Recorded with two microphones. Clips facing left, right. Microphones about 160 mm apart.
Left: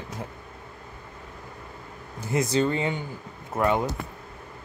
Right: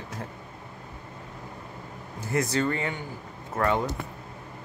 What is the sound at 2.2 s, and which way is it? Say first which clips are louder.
Speech: left 2 dB; 15° left (ahead or behind).